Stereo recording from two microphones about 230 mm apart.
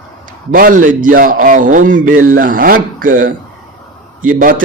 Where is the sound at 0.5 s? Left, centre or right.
Right.